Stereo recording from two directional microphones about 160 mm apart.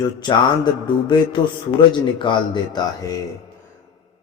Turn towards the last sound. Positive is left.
turn(degrees=30)  # may be behind; listen again after turning